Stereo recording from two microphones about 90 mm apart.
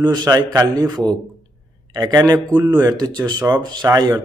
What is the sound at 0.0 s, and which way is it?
Speech, 55° right (ahead or behind).